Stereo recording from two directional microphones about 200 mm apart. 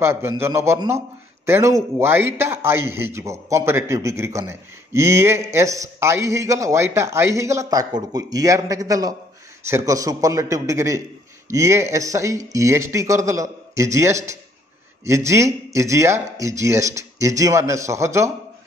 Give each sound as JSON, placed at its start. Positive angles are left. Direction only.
{"t": 0.0, "sound": "a man's voice", "side_deg": -10}